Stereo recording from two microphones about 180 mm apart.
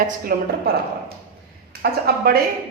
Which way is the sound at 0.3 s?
55° right (ahead or behind).